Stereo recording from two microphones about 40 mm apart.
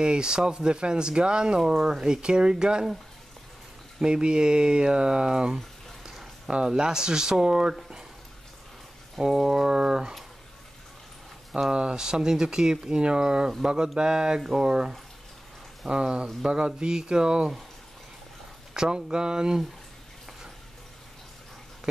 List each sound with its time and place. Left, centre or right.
0.0 s speech: right
4.0 s speech: centre
6.7 s speech: centre
9.2 s speech: centre
11.7 s speech: right
15.9 s speech: right
18.7 s speech: centre